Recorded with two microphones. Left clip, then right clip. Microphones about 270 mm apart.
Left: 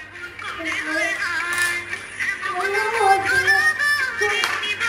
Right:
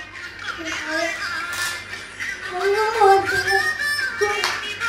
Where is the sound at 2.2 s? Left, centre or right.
Left.